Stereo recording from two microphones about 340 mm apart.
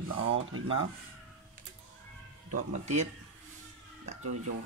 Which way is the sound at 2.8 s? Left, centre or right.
Centre.